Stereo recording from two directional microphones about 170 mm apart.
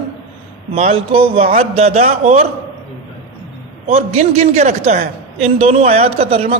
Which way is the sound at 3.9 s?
40° right (ahead or behind).